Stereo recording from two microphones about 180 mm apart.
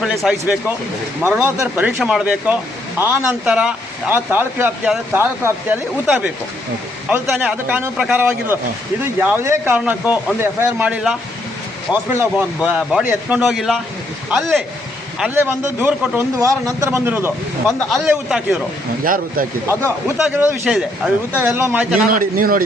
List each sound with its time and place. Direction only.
0.0 s a man's voice: centre (ahead or behind)
15.4 s a man's voice: 15° right (ahead or behind)
19.0 s a man's voice: 50° right (ahead or behind)
20.1 s speech: 5° right (ahead or behind)
22.0 s a man's voice: 50° right (ahead or behind)